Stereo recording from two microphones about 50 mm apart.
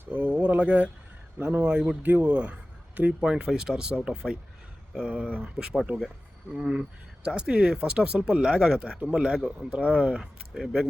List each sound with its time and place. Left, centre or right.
0.1 s speech: right
1.4 s speech: right
1.6 s a man's voice: right
3.1 s speech: centre
5.6 s speech: centre